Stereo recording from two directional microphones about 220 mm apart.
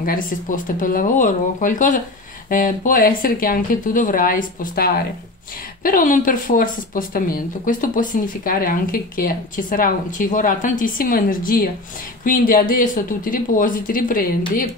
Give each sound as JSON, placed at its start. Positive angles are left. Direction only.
{"t": 0.0, "sound": "speech", "side_deg": 40}